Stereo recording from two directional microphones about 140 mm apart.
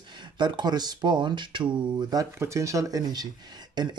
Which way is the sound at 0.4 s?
30° right (ahead or behind).